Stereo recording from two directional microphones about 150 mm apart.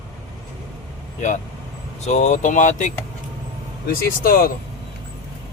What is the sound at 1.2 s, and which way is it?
Speech, 55° left (ahead or behind).